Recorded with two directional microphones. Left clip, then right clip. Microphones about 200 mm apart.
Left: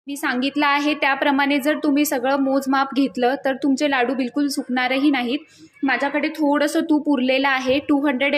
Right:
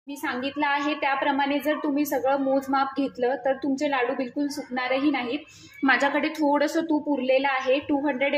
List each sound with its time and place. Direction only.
0.2 s a woman's voice: 35° left (ahead or behind)
5.9 s speech: 15° left (ahead or behind)
6.5 s a woman's voice: 30° left (ahead or behind)